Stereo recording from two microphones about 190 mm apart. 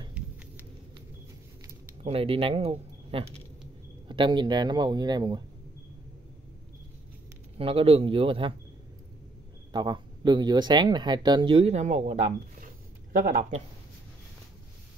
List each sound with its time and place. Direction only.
2.0 s speech: 30° right (ahead or behind)
7.5 s speech: 30° right (ahead or behind)
9.7 s speech: 25° right (ahead or behind); by 13.6 s 45° right (ahead or behind)